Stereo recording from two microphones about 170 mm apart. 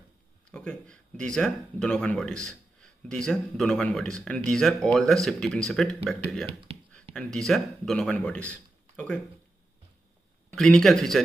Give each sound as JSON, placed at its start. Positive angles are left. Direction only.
{"t": 0.5, "sound": "speech", "side_deg": 5}
{"t": 6.4, "sound": "speech", "side_deg": -35}
{"t": 7.2, "sound": "speech", "side_deg": 5}
{"t": 10.5, "sound": "speech", "side_deg": 5}